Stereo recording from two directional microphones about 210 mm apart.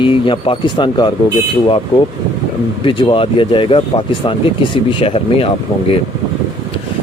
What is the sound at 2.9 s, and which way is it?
Speech, 25° left (ahead or behind).